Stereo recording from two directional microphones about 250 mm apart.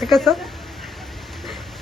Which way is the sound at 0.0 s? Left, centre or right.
Centre.